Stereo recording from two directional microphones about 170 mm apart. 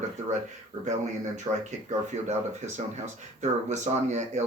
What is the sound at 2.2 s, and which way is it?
Speech, 45° right (ahead or behind).